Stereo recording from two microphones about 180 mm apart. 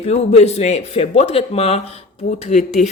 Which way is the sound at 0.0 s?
35° left (ahead or behind).